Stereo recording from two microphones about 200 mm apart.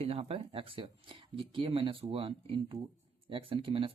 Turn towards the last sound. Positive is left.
turn(degrees=-25)  # may be behind; listen again after turning